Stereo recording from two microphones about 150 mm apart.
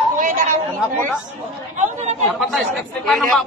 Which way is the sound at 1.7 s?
50° right (ahead or behind).